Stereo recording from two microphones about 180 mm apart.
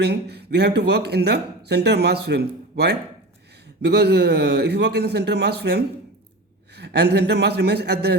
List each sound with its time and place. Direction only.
0.0 s a man's voice: 65° right (ahead or behind)